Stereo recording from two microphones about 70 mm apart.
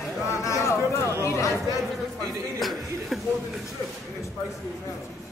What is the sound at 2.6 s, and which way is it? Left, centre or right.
Speech, centre.